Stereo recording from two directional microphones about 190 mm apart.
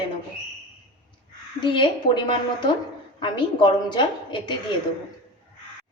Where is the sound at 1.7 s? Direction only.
25° left (ahead or behind).